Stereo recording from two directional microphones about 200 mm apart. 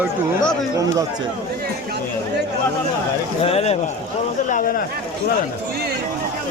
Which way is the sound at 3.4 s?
30° left (ahead or behind).